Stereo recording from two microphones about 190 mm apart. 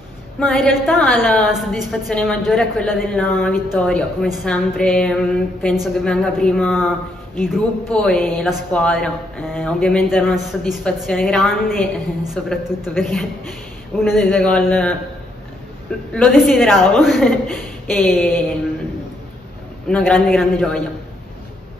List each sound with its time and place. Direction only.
0.4 s speech: 5° left (ahead or behind)
16.1 s speech: 5° left (ahead or behind)
19.9 s speech: 5° left (ahead or behind)